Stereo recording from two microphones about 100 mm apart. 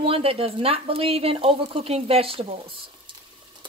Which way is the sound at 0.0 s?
70° right (ahead or behind).